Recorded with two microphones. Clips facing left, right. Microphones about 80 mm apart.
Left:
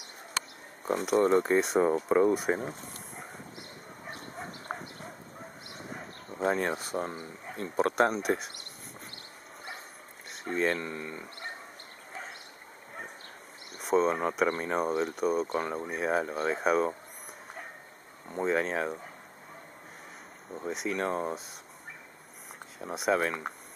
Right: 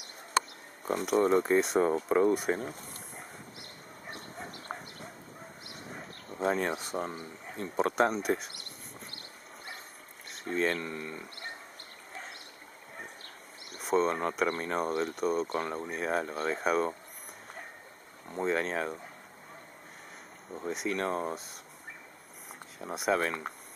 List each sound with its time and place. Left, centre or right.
0.8 s speech: centre
5.9 s speech: centre
10.3 s speech: centre
13.7 s speech: centre
18.3 s speech: centre
20.5 s speech: centre
22.8 s speech: centre